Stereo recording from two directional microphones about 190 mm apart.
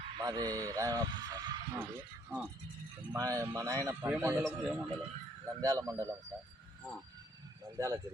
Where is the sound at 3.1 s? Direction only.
15° right (ahead or behind).